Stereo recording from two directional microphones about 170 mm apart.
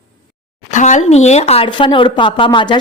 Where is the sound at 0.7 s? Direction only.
45° left (ahead or behind).